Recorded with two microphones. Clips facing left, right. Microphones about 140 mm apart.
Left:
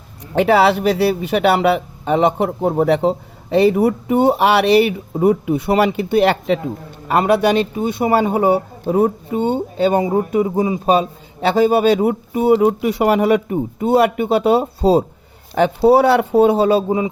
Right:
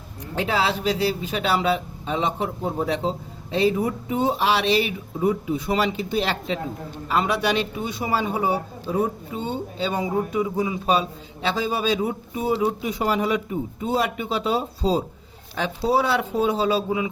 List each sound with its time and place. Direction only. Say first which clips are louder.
0.3 s speech: left 10 dB; 65° left (ahead or behind)